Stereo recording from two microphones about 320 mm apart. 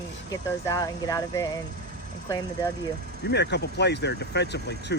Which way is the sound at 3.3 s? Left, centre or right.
Left.